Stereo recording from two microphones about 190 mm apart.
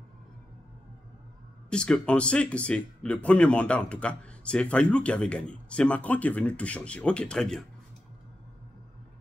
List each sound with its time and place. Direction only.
1.7 s speech: 5° left (ahead or behind)